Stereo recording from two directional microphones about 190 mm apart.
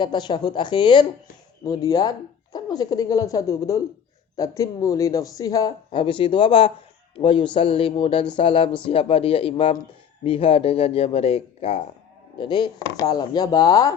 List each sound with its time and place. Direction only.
0.0 s speech: 25° left (ahead or behind)